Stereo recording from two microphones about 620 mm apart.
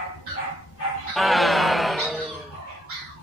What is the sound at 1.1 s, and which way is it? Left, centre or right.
Music, centre.